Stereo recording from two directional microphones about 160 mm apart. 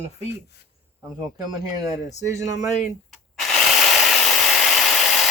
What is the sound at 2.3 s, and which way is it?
Speech, 45° left (ahead or behind).